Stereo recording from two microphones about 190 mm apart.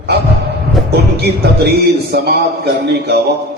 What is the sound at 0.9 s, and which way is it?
A man's voice, 60° right (ahead or behind).